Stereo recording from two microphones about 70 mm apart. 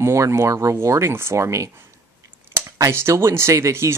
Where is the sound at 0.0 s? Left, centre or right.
Right.